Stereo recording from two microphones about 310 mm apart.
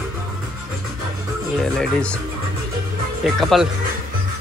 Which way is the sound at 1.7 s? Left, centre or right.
Centre.